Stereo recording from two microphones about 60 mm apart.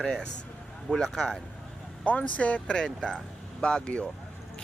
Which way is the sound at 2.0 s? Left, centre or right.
Left.